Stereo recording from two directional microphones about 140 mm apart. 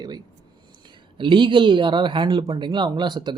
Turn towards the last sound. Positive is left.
turn(degrees=-30)  # may be behind; listen again after turning